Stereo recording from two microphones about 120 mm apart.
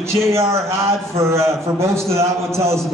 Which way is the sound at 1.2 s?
25° right (ahead or behind).